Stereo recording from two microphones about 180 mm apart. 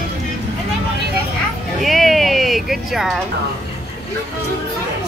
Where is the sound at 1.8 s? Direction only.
Centre (ahead or behind).